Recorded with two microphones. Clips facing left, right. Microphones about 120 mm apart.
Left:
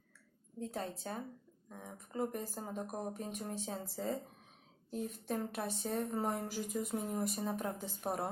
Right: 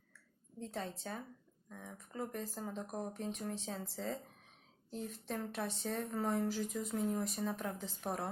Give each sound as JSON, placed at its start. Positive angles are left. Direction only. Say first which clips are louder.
{"t": 0.6, "sound": "speech", "louder": "left 2 dB", "side_deg": 10}